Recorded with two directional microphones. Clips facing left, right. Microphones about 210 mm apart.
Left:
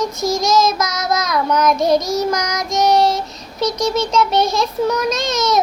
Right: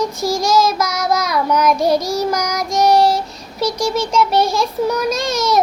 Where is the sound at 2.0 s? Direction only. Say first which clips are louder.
Even; 30° right (ahead or behind).